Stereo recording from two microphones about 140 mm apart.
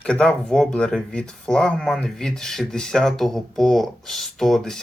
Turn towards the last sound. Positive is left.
turn(degrees=0)  # may be behind; listen again after turning